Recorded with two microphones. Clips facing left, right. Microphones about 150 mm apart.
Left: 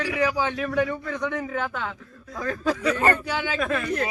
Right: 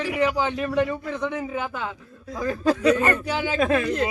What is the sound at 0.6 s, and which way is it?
Speech, 5° right (ahead or behind).